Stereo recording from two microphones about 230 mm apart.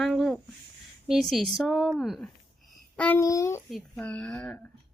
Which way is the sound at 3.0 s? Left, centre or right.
Centre.